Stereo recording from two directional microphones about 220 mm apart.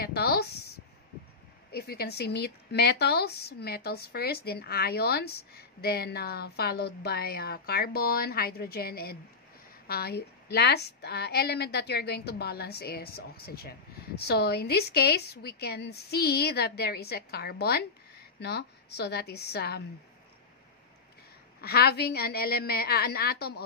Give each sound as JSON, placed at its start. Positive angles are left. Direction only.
{"t": 0.0, "sound": "a sound", "side_deg": 45}
{"t": 1.7, "sound": "a woman's voice", "side_deg": 45}
{"t": 21.5, "sound": "a woman's voice", "side_deg": 45}